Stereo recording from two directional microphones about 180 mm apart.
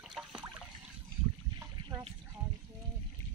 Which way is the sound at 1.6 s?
20° right (ahead or behind).